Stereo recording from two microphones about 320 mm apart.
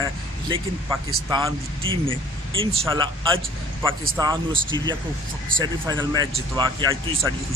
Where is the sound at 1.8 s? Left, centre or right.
Centre.